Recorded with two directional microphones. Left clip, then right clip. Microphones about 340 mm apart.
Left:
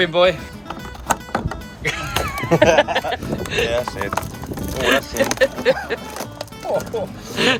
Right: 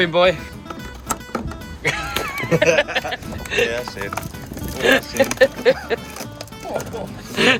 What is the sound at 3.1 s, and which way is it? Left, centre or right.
Speech, left.